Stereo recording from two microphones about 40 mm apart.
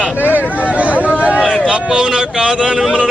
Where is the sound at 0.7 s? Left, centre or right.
Right.